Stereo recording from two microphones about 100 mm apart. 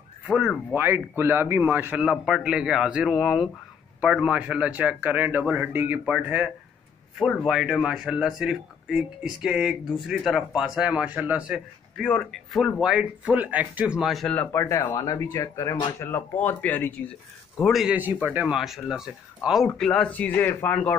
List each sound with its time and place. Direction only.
0.7 s speech: 20° right (ahead or behind)
12.0 s speech: 5° left (ahead or behind)
14.3 s speech: 15° left (ahead or behind)
14.6 s speech: 30° left (ahead or behind)
16.3 s speech: 15° left (ahead or behind)
17.6 s speech: centre (ahead or behind)
17.9 s speech: 15° right (ahead or behind); by 19.9 s centre (ahead or behind)
19.9 s speech: 15° left (ahead or behind)